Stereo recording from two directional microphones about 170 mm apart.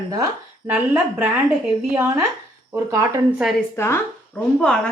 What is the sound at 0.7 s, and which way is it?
Speech, 10° right (ahead or behind).